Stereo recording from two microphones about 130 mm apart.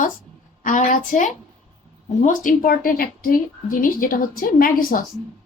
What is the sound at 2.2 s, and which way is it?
A woman's voice, 90° left.